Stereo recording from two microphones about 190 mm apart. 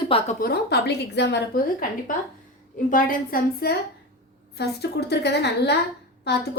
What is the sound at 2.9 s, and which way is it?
A woman's voice, 50° left (ahead or behind).